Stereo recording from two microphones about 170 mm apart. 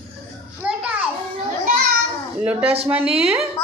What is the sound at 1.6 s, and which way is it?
Children playing, 55° right (ahead or behind).